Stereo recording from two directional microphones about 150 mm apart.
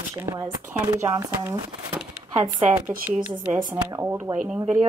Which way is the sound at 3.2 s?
10° right (ahead or behind).